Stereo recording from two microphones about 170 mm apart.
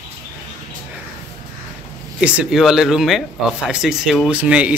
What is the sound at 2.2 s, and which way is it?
Speech, 5° right (ahead or behind).